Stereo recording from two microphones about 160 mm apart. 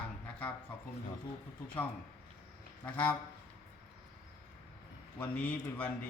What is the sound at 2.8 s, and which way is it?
Speech, 10° left (ahead or behind).